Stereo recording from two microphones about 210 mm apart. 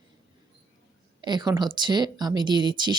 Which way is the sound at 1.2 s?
20° right (ahead or behind).